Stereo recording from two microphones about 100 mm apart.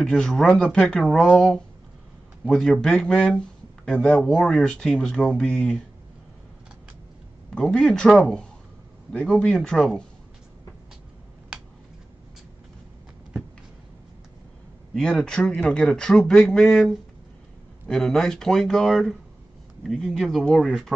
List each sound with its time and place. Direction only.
0.0 s speech: 5° left (ahead or behind)
7.5 s speech: 5° left (ahead or behind)
15.0 s speech: 5° left (ahead or behind)